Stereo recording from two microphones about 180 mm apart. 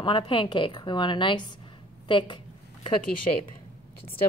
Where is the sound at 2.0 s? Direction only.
25° left (ahead or behind).